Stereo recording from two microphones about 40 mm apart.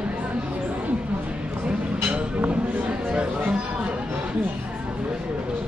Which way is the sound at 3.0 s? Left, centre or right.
Right.